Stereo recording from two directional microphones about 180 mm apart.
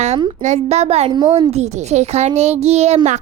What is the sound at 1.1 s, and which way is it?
Speech, 25° right (ahead or behind).